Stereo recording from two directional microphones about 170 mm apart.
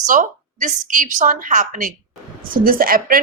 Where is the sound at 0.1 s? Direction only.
50° right (ahead or behind).